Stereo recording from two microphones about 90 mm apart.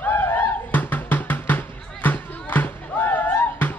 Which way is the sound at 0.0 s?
20° left (ahead or behind).